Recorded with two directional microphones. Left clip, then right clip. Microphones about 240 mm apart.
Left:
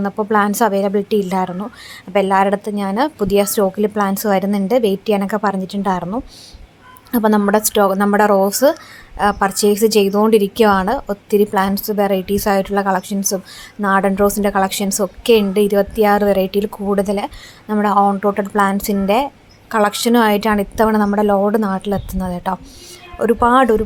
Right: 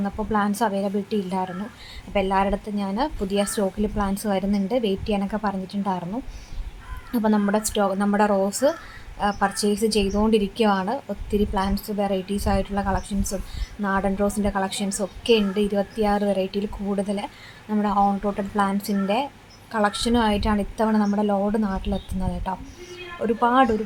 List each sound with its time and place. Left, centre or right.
0.0 s a woman's voice: left